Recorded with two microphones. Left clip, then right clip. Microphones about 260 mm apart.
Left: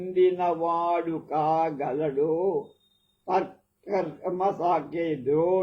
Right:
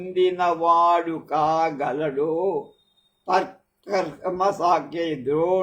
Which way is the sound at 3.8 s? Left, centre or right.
Right.